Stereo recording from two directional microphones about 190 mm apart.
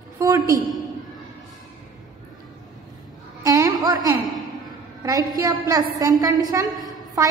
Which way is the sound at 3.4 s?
20° right (ahead or behind).